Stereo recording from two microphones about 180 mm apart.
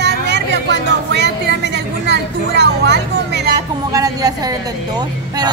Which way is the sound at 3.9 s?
20° right (ahead or behind).